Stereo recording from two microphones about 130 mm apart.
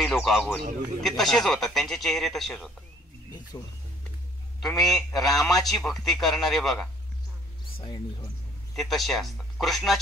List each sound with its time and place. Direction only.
0.0 s a man's voice: 5° left (ahead or behind)
3.5 s speech: 30° left (ahead or behind)
4.6 s a man's voice: centre (ahead or behind)
7.7 s speech: 40° left (ahead or behind)
8.7 s a man's voice: centre (ahead or behind)